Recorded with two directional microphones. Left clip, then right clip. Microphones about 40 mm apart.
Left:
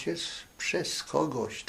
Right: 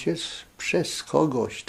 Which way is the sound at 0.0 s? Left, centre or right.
Right.